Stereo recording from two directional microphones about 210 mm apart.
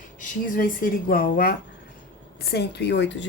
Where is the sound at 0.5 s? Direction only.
40° left (ahead or behind).